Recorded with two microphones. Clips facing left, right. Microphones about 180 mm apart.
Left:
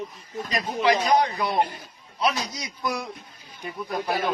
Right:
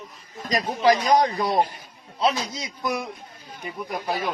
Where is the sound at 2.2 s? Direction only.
25° right (ahead or behind).